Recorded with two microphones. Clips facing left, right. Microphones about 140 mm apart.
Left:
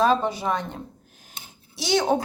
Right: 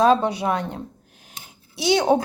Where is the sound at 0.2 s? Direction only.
65° right (ahead or behind).